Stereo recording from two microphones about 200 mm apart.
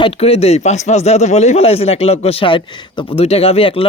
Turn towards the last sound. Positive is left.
turn(degrees=30)  # may be behind; listen again after turning